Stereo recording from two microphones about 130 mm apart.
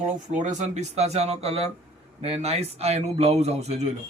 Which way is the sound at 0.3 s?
70° right (ahead or behind).